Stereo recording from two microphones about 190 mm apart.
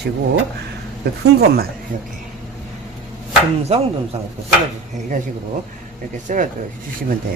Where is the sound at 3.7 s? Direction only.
35° right (ahead or behind).